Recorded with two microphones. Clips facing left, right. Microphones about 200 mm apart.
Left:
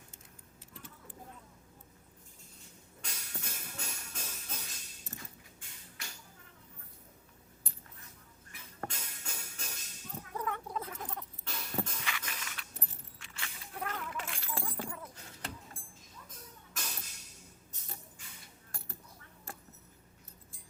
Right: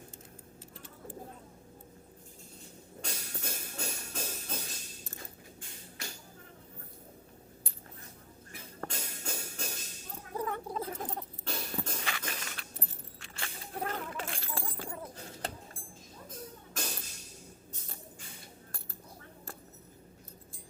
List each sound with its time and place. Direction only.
3.0 s music: 30° right (ahead or behind)
8.5 s music: 30° right (ahead or behind)
11.9 s keys jangling: 35° right (ahead or behind)